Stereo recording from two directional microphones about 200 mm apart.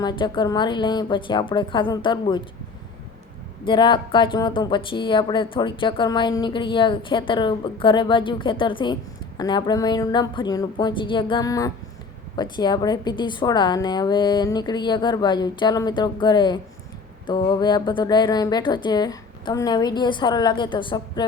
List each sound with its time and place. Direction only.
0.0 s speech: 20° left (ahead or behind)
3.7 s speech: 25° left (ahead or behind)